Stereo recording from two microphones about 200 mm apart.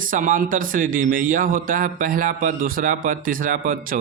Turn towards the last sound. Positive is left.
turn(degrees=-45)  # may be behind; listen again after turning